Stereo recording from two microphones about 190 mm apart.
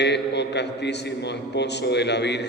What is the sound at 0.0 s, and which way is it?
A man's voice, 65° left (ahead or behind).